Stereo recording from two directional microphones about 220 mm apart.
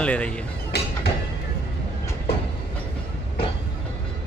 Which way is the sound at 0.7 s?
50° left (ahead or behind).